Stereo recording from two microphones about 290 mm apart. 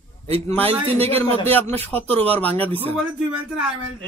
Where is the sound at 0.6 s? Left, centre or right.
Centre.